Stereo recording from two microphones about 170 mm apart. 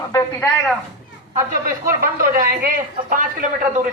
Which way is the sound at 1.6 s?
55° right (ahead or behind).